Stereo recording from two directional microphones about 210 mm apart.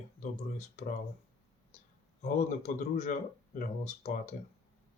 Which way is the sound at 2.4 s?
35° left (ahead or behind).